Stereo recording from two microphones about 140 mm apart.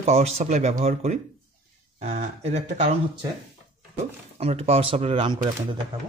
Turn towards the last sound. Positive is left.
turn(degrees=-35)  # may be behind; listen again after turning